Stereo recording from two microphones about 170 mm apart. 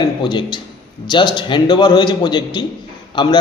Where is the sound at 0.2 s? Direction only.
25° left (ahead or behind).